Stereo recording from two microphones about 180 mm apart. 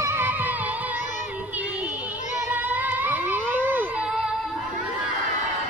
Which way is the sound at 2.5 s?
10° right (ahead or behind).